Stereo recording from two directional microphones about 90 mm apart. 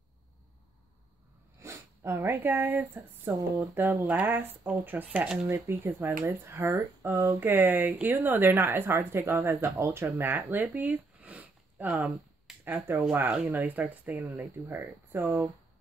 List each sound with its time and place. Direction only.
1.6 s a sound: 30° right (ahead or behind)
3.3 s speech: 40° right (ahead or behind)
3.7 s a woman's voice: 25° right (ahead or behind)
5.5 s a woman's voice: 30° right (ahead or behind)
10.8 s sniff: 15° right (ahead or behind)
12.5 s a sound: centre (ahead or behind)
12.9 s a woman's voice: 25° right (ahead or behind)
14.2 s a woman's voice: 30° right (ahead or behind)